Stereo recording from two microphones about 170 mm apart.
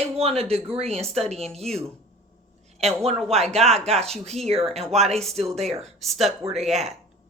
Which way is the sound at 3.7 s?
40° right (ahead or behind).